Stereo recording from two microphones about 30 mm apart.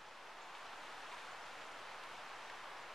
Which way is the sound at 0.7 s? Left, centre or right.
Centre.